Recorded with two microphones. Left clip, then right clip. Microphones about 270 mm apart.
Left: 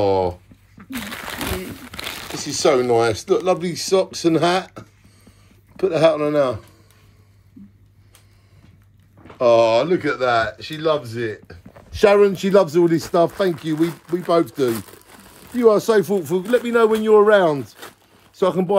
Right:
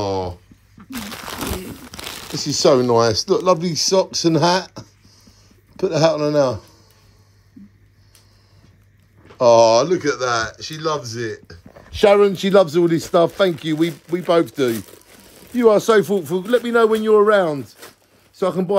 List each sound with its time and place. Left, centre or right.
0.0 s a sound: centre
2.3 s speech: right
2.9 s speech: right
3.3 s speech: centre
9.4 s speech: centre
15.5 s speech: centre